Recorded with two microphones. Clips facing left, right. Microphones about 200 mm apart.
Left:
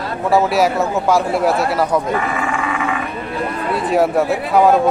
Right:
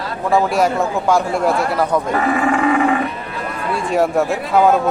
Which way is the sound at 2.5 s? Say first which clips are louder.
Right 6 dB; 40° right (ahead or behind).